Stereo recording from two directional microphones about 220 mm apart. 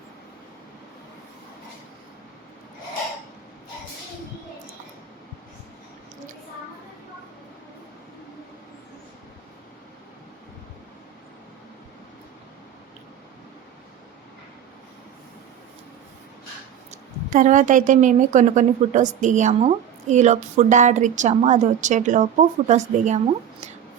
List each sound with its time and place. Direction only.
16.9 s a woman's voice: 35° right (ahead or behind)